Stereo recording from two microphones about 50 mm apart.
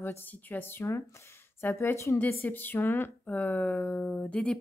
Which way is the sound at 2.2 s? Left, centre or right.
Left.